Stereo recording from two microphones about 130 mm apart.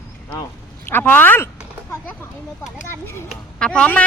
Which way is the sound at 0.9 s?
15° left (ahead or behind).